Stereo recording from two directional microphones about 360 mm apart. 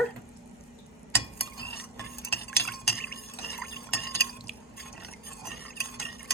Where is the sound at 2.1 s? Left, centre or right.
Left.